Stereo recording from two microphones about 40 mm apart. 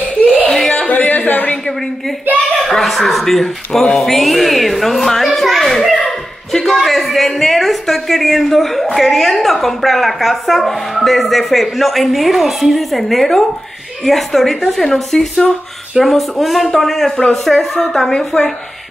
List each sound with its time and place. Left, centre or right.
0.7 s a sound: left
2.6 s a woman's voice: centre
15.1 s speech: left
16.0 s a woman's voice: centre
17.9 s a woman's voice: centre